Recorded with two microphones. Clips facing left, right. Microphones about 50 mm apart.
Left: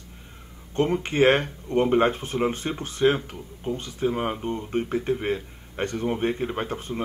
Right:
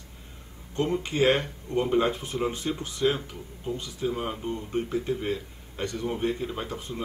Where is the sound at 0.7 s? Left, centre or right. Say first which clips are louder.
Left 4 dB; left.